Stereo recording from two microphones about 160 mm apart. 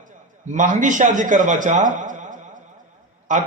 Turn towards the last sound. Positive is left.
turn(degrees=-50)  # may be behind; listen again after turning